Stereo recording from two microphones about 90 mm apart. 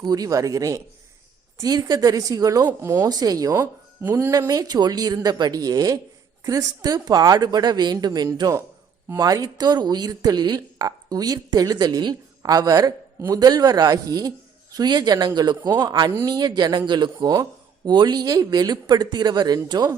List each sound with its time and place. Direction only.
0.0 s speech: 45° right (ahead or behind)
2.8 s speech: 30° right (ahead or behind)
3.1 s speech: 45° right (ahead or behind)
3.6 s speech: 25° right (ahead or behind)
4.3 s speech: 45° right (ahead or behind)